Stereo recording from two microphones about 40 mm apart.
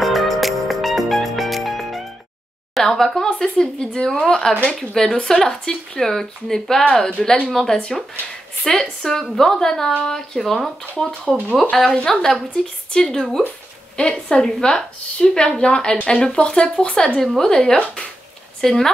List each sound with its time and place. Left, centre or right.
0.0 s music: centre
2.8 s speech: centre
6.8 s a woman's voice: centre
11.7 s a woman's voice: centre
17.2 s speech: centre